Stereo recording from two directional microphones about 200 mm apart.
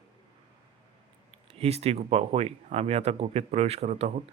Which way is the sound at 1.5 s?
30° right (ahead or behind).